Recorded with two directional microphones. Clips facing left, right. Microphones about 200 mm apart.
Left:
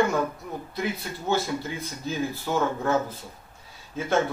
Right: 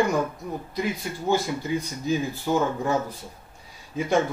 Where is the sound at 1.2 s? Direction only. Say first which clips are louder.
Right 2 dB; 15° right (ahead or behind).